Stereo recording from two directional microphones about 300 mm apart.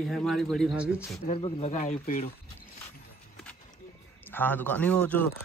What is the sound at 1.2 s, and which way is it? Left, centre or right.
Speech, centre.